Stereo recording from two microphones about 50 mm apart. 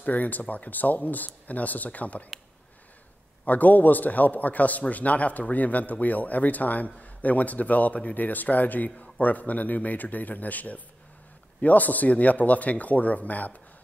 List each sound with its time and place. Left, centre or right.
0.0 s speech: left
3.4 s speech: left